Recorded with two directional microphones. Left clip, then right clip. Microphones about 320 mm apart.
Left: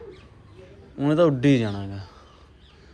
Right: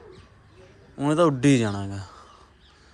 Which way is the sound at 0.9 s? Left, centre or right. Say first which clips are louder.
Left 1 dB; right.